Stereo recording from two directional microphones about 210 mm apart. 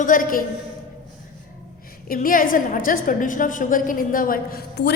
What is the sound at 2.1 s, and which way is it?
A woman's voice, 40° left (ahead or behind).